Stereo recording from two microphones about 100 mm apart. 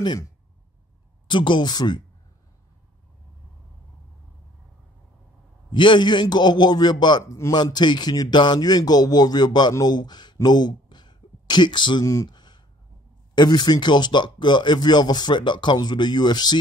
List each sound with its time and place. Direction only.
1.2 s speech: 55° left (ahead or behind)
5.7 s speech: 55° left (ahead or behind)
12.1 s a sound: 40° left (ahead or behind)
13.3 s speech: 45° left (ahead or behind)